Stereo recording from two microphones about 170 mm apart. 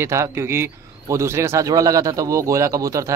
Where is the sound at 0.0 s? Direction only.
15° right (ahead or behind).